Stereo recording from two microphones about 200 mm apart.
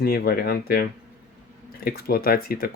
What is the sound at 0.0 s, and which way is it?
Speech, 50° left (ahead or behind).